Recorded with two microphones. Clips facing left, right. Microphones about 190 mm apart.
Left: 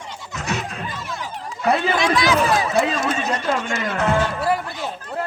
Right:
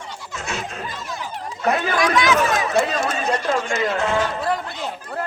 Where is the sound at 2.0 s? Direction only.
30° left (ahead or behind).